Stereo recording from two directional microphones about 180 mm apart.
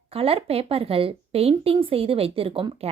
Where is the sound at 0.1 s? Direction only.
30° right (ahead or behind).